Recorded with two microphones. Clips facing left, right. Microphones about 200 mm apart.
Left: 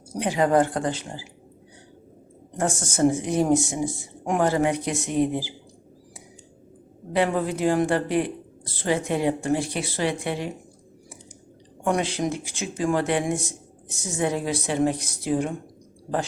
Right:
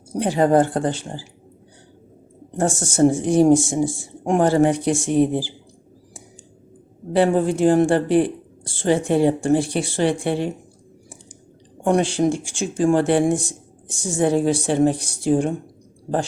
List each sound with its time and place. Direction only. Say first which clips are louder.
0.1 s speech: right 4 dB; 30° right (ahead or behind)
2.6 s speech: right 5 dB; 30° right (ahead or behind)
7.1 s speech: right 6 dB; 30° right (ahead or behind)
11.9 s speech: right 6 dB; 30° right (ahead or behind)